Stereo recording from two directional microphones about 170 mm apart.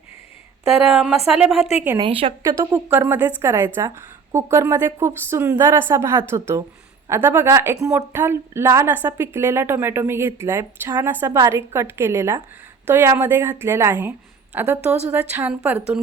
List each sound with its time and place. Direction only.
0.7 s speech: 5° right (ahead or behind)
2.0 s a woman's voice: 35° right (ahead or behind)
2.4 s a woman's voice: 15° right (ahead or behind)